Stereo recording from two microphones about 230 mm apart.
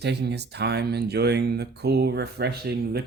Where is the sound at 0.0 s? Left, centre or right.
Right.